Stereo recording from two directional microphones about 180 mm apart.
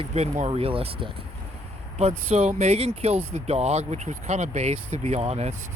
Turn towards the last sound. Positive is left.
turn(degrees=-35)  # may be behind; listen again after turning